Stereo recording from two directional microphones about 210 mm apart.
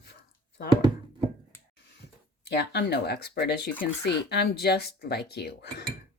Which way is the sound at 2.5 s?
50° left (ahead or behind).